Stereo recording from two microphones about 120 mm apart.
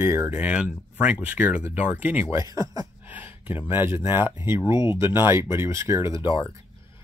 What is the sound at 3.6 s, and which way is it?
Speech, 20° right (ahead or behind).